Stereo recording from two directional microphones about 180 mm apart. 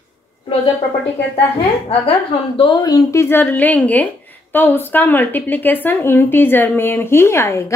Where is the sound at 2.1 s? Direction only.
30° left (ahead or behind).